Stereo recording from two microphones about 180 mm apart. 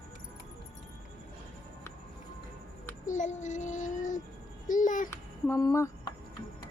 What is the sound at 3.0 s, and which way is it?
Child singing, 45° left (ahead or behind).